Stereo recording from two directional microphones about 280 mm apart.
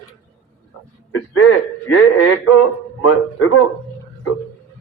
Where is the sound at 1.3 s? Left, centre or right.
Left.